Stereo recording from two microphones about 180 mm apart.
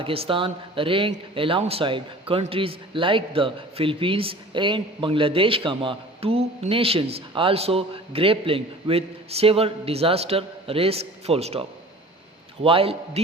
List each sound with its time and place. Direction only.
0.0 s speech: 30° right (ahead or behind)
12.6 s speech: 30° right (ahead or behind)